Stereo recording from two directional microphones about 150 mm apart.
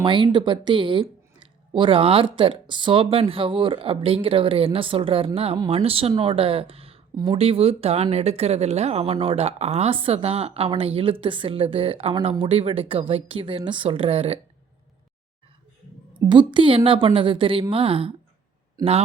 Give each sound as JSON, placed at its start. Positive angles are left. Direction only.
{"t": 0.0, "sound": "speech", "side_deg": -30}
{"t": 16.3, "sound": "speech", "side_deg": -30}
{"t": 18.8, "sound": "a man's voice", "side_deg": -25}